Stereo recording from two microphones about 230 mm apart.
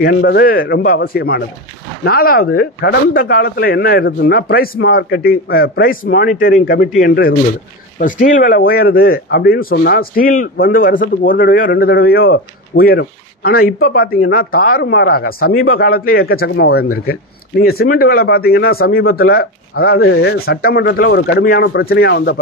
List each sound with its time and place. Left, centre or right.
0.0 s a man's voice: left